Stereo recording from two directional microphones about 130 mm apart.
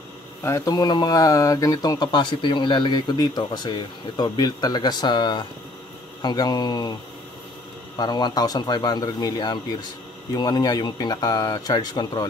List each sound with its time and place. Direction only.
0.4 s speech: 25° left (ahead or behind)
8.0 s speech: 35° left (ahead or behind)